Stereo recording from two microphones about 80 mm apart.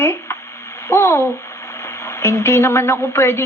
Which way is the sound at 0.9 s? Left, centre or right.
Left.